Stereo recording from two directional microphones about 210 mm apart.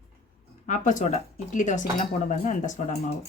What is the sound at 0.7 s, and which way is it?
Speech, 35° left (ahead or behind).